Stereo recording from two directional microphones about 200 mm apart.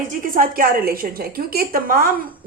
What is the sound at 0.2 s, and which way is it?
A woman's voice, 45° right (ahead or behind).